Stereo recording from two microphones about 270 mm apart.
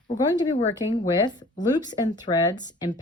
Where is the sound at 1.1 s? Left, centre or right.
Centre.